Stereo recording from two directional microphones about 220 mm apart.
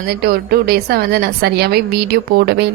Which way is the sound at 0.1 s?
45° right (ahead or behind).